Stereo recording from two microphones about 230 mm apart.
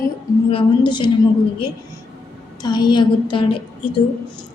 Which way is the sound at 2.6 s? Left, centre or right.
Centre.